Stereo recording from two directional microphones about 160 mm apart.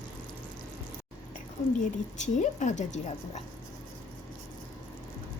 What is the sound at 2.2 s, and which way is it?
A woman's voice, 50° left (ahead or behind).